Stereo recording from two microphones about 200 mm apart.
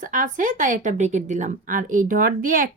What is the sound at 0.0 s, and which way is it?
A woman's voice, 40° right (ahead or behind).